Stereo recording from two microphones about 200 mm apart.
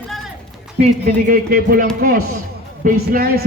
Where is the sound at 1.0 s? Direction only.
45° right (ahead or behind).